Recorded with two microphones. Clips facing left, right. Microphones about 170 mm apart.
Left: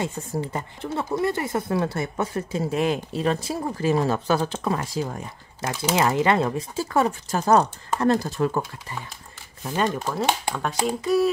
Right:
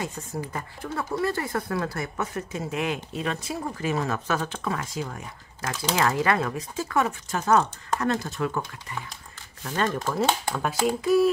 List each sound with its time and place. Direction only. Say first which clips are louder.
0.0 s speech: left 4 dB; 25° left (ahead or behind)
5.6 s speech: left 3 dB; 20° left (ahead or behind); by 8.6 s 35° left (ahead or behind)
9.6 s speech: left 2 dB; 20° left (ahead or behind)
10.5 s speech: even; 5° right (ahead or behind)